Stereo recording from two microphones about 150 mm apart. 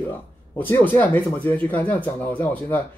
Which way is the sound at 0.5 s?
10° left (ahead or behind).